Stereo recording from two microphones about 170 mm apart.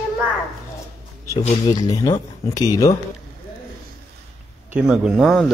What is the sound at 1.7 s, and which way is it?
Speech, 20° left (ahead or behind).